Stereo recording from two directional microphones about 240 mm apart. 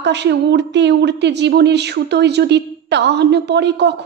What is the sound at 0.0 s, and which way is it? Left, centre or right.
Speech, right.